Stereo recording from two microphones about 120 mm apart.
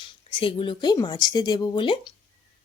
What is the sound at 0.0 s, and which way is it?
Speech, 45° left (ahead or behind).